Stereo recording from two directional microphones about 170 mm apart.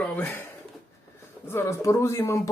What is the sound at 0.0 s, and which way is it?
Speech, 10° left (ahead or behind).